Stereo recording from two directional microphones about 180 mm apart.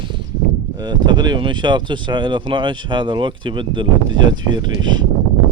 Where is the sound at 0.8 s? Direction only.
25° right (ahead or behind).